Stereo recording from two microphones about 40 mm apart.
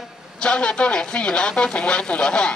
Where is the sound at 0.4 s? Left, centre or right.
Left.